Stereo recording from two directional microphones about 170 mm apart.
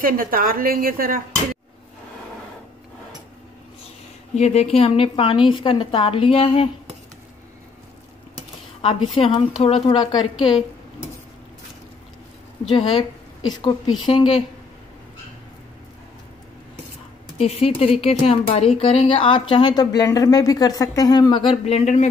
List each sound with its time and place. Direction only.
0.0 s speech: 55° right (ahead or behind)
4.4 s a woman's voice: 40° left (ahead or behind)
8.8 s a woman's voice: 35° left (ahead or behind)
12.6 s a woman's voice: 30° left (ahead or behind)
17.4 s a woman's voice: 35° left (ahead or behind)